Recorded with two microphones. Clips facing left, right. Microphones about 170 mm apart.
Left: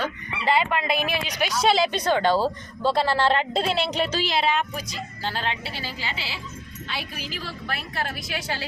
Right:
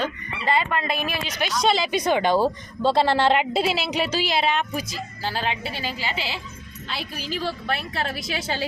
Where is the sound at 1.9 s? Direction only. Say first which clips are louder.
Right 1 dB; 15° right (ahead or behind).